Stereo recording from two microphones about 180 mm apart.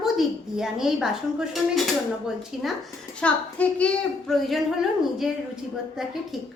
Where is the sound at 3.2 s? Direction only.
5° left (ahead or behind).